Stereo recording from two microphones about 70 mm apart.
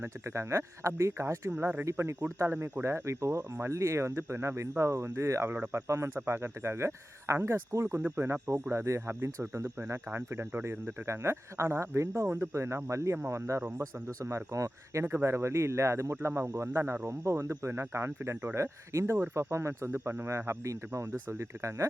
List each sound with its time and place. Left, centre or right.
0.0 s speech: right
7.9 s speech: right
15.0 s speech: right